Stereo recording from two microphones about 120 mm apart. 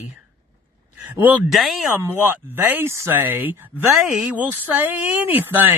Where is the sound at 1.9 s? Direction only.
20° right (ahead or behind).